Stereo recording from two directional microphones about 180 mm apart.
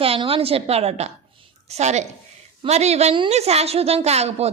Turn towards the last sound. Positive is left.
turn(degrees=-35)  # may be behind; listen again after turning